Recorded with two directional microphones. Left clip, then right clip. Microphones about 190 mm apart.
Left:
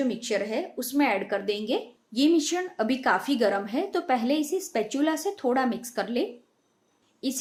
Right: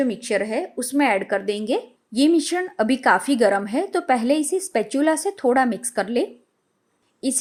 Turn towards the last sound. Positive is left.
turn(degrees=-40)  # may be behind; listen again after turning